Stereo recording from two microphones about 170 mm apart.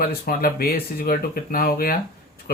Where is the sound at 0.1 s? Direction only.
60° left (ahead or behind).